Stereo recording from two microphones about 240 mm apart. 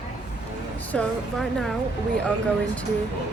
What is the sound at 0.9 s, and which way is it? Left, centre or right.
Speech, centre.